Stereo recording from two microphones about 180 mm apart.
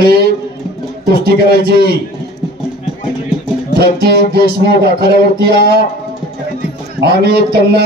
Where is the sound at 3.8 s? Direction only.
60° right (ahead or behind).